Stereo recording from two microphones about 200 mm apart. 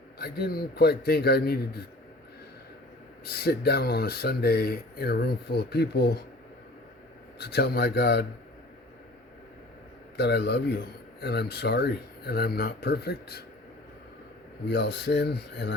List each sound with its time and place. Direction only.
0.2 s speech: 50° left (ahead or behind)
3.2 s speech: 50° left (ahead or behind)
7.3 s speech: 55° left (ahead or behind)
10.2 s speech: 55° left (ahead or behind)
14.7 s speech: 60° left (ahead or behind)